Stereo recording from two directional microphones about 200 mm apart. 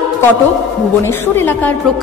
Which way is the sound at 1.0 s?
10° left (ahead or behind).